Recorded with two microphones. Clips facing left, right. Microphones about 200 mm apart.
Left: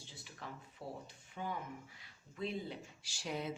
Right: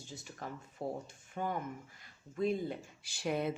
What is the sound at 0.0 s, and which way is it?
Speech, 45° right (ahead or behind).